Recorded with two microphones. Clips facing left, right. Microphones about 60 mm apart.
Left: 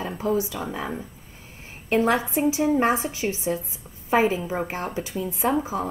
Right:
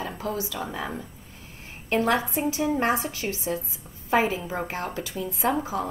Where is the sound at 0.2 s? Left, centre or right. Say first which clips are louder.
Left 8 dB; left.